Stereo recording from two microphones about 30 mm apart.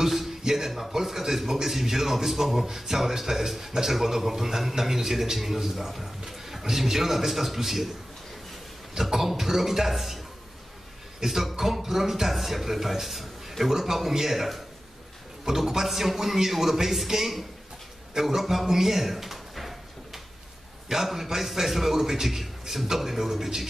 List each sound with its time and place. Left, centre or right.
0.0 s a sound: centre
0.4 s a man's voice: centre
9.1 s a man's voice: centre
11.2 s a man's voice: centre
18.1 s a sound: centre
20.9 s a man's voice: centre